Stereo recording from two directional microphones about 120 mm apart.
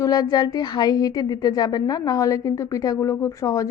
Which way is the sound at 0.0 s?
30° left (ahead or behind).